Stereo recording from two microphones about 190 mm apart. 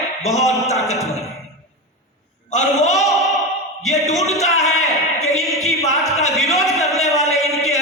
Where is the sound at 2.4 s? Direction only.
40° left (ahead or behind).